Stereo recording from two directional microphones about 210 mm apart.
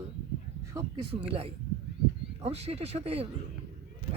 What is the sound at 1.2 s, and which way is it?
Speech, 30° right (ahead or behind).